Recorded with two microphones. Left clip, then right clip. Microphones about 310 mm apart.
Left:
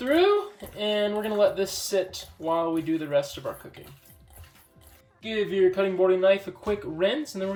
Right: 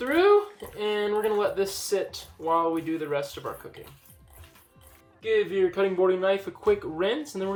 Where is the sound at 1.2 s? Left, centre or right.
Centre.